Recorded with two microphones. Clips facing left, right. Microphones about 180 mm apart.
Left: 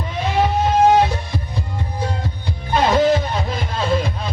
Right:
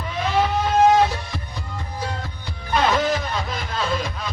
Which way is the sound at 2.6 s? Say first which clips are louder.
Left 5 dB; 25° left (ahead or behind).